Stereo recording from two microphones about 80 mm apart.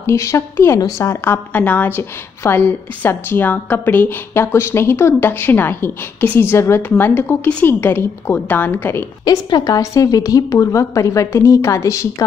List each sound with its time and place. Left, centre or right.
0.0 s a woman's voice: left
0.7 s a woman's voice: left
1.0 s a woman's voice: left
9.2 s a woman's voice: left